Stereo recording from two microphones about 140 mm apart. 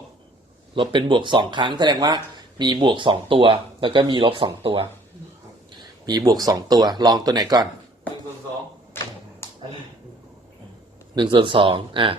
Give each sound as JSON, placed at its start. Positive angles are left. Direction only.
{"t": 0.8, "sound": "speech", "side_deg": -35}
{"t": 6.1, "sound": "speech", "side_deg": -30}
{"t": 9.4, "sound": "a sound", "side_deg": 20}
{"t": 11.1, "sound": "speech", "side_deg": -35}